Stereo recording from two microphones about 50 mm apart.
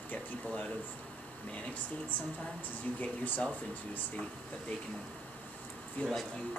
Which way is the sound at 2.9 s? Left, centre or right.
Left.